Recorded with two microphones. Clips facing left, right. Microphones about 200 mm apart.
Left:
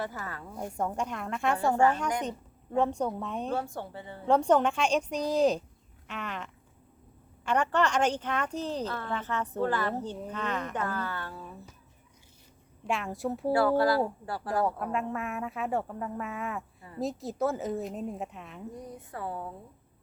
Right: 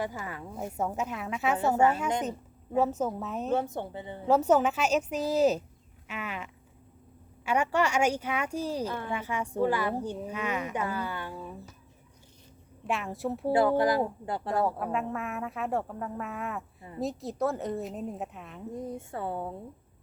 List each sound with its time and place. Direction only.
0.0 s speech: 15° right (ahead or behind)
2.7 s speech: 5° right (ahead or behind)
3.5 s speech: 20° right (ahead or behind)
4.3 s speech: 5° right (ahead or behind)
12.9 s speech: centre (ahead or behind)
13.5 s speech: 20° right (ahead or behind)
14.5 s speech: centre (ahead or behind)
18.7 s speech: 25° right (ahead or behind)